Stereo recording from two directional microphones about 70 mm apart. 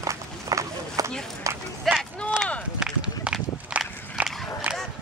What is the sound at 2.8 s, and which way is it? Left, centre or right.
Walk, centre.